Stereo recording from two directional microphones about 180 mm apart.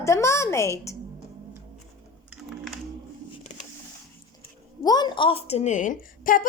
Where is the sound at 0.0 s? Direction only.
15° left (ahead or behind).